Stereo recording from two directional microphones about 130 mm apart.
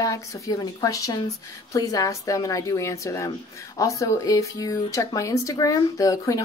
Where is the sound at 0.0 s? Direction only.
25° left (ahead or behind).